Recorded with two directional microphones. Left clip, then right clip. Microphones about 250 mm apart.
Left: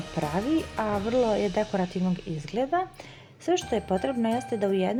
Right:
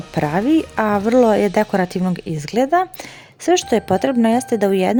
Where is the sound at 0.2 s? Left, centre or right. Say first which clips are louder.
Right 10 dB; right.